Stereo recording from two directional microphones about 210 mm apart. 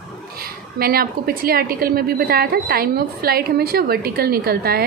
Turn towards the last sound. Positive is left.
turn(degrees=-45)  # may be behind; listen again after turning